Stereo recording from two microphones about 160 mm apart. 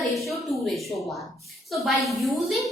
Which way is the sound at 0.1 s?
Centre (ahead or behind).